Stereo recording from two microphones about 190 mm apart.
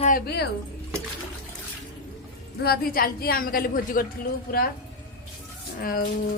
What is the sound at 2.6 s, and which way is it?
A woman's voice, 55° left (ahead or behind).